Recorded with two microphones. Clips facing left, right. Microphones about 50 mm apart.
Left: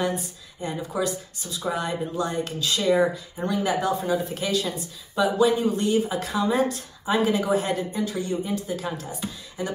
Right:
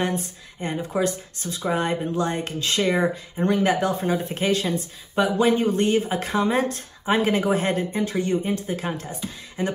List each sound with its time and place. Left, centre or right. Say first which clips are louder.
0.0 s speech: right 1 dB; right